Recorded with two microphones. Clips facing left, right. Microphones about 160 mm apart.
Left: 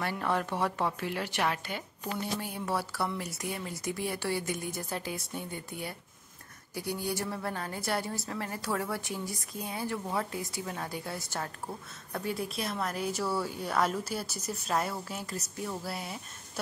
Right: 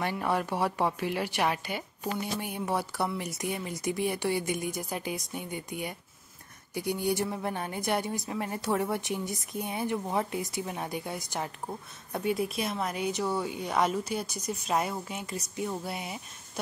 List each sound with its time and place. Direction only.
0.0 s a woman's voice: 15° right (ahead or behind)
12.5 s speech: centre (ahead or behind)
13.2 s speech: 15° right (ahead or behind)
13.7 s speech: centre (ahead or behind)
15.6 s speech: 20° right (ahead or behind)